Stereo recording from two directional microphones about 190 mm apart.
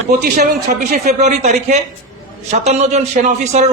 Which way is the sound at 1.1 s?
35° right (ahead or behind).